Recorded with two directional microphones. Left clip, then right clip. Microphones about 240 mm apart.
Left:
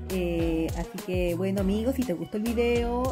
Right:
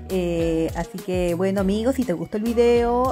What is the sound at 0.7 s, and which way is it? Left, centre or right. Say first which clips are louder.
Speech: right 6 dB; centre.